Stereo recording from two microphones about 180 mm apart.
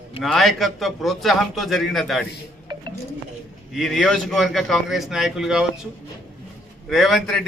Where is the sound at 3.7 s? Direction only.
Centre (ahead or behind).